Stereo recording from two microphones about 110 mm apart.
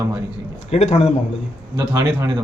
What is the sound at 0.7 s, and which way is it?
Speech, 75° left (ahead or behind).